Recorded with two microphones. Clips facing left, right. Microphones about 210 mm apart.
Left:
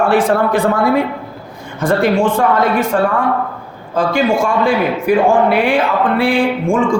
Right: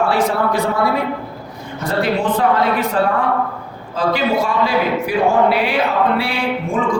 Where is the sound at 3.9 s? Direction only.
50° left (ahead or behind).